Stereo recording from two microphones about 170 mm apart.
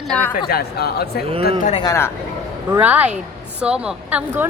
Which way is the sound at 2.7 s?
10° right (ahead or behind).